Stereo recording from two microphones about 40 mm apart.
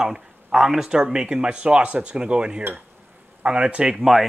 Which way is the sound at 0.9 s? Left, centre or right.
Centre.